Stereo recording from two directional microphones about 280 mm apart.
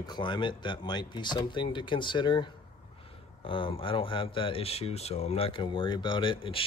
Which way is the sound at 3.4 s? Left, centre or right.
Centre.